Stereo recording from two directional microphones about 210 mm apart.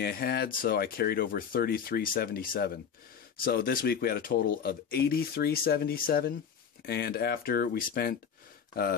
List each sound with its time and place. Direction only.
0.0 s speech: 45° left (ahead or behind)